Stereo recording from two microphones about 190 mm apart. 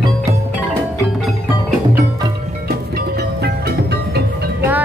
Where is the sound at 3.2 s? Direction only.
60° right (ahead or behind).